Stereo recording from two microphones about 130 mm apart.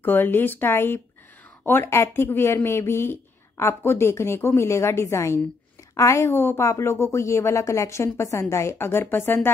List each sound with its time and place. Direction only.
0.0 s speech: 15° left (ahead or behind)